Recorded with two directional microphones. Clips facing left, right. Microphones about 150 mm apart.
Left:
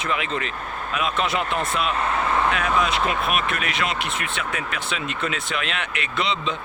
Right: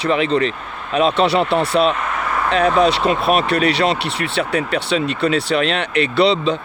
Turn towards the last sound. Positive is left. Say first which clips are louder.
# right 10 dB
turn(degrees=-35)  # may be behind; listen again after turning